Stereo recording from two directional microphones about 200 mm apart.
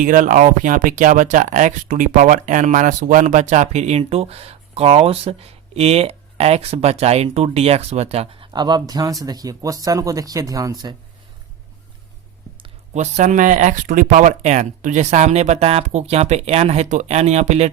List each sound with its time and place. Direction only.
0.0 s speech: 40° right (ahead or behind); by 10.9 s 20° right (ahead or behind)
12.6 s speech: 35° right (ahead or behind)